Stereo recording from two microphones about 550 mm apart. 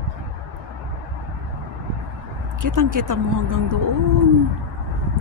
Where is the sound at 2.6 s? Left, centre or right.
Right.